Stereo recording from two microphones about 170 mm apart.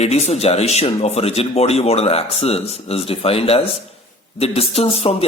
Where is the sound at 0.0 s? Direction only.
40° left (ahead or behind).